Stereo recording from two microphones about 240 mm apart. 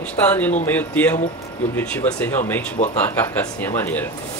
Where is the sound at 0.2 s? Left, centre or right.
Centre.